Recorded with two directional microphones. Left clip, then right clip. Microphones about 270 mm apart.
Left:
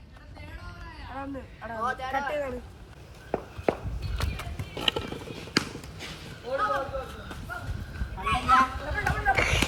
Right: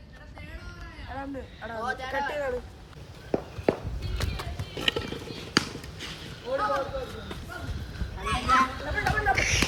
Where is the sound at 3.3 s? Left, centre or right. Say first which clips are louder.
Right 2 dB; left.